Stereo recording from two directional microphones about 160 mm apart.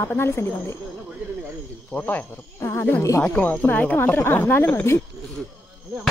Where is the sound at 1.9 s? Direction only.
10° left (ahead or behind).